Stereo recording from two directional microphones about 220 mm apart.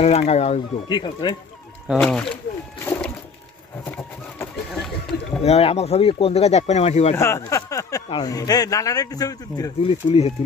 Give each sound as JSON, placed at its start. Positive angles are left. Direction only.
{"t": 0.0, "sound": "speech", "side_deg": 30}
{"t": 1.9, "sound": "speech", "side_deg": 5}
{"t": 2.8, "sound": "a sound", "side_deg": 10}
{"t": 3.8, "sound": "bird", "side_deg": 5}
{"t": 5.4, "sound": "speech", "side_deg": 25}
{"t": 7.2, "sound": "speech", "side_deg": 15}